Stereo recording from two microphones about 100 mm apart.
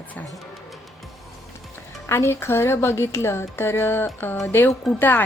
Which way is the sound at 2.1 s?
25° left (ahead or behind).